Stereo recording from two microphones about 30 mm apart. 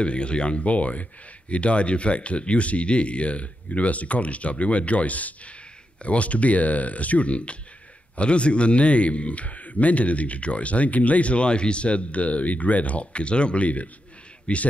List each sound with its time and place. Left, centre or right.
0.0 s speech: left
0.7 s a man's voice: left